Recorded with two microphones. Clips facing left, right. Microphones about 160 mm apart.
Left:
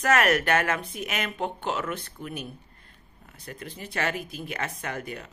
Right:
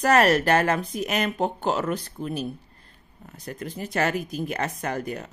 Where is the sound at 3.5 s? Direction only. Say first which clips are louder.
Right 6 dB; 45° right (ahead or behind).